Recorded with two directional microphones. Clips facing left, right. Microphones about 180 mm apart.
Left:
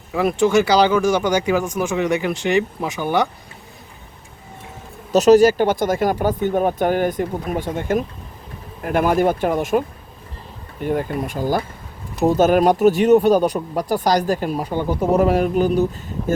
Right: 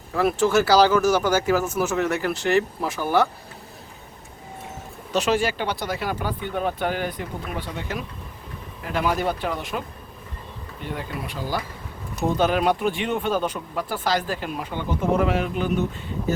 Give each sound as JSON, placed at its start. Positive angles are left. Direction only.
{"t": 0.1, "sound": "speech", "side_deg": 0}
{"t": 5.1, "sound": "speech", "side_deg": 40}